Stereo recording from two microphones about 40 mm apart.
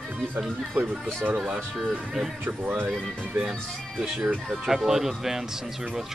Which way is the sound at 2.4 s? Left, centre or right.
Right.